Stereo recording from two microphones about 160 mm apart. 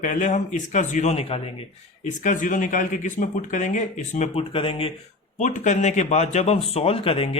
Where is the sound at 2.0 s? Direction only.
50° left (ahead or behind); by 4.9 s 35° left (ahead or behind).